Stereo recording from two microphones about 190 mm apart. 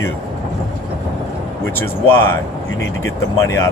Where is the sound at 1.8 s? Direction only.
10° left (ahead or behind).